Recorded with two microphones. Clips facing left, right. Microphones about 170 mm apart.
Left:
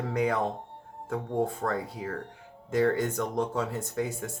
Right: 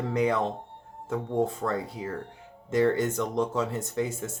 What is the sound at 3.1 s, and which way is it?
Speech, 25° right (ahead or behind).